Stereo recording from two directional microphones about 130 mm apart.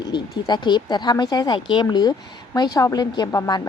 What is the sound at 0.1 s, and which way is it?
A woman's voice, 35° left (ahead or behind).